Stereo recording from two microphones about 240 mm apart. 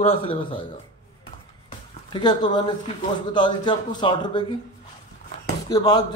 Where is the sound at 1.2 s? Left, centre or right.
Left.